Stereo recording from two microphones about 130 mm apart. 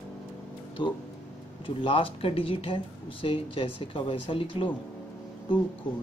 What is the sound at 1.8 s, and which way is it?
Speech, 45° left (ahead or behind).